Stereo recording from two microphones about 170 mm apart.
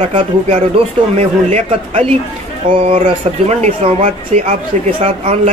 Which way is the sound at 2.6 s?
30° right (ahead or behind).